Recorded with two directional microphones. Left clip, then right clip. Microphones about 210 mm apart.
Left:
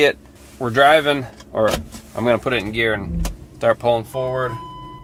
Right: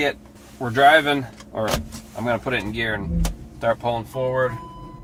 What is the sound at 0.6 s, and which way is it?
Speech, 50° left (ahead or behind).